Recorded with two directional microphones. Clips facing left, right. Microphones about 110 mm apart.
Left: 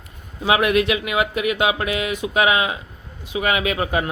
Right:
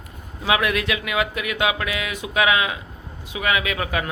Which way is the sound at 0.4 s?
25° left (ahead or behind).